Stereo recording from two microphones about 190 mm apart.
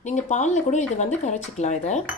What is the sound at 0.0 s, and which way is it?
Speech, 40° left (ahead or behind).